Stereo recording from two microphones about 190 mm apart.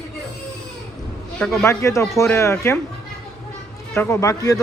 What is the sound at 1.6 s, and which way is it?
Speech, 15° left (ahead or behind).